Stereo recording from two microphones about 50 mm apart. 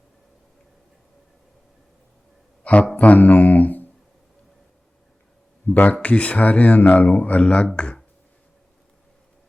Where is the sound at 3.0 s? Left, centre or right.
Left.